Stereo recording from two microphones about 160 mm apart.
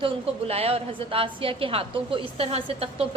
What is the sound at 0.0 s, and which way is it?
A woman's voice, 40° right (ahead or behind).